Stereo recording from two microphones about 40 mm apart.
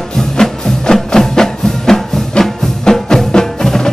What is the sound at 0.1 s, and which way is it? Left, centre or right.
Music, centre.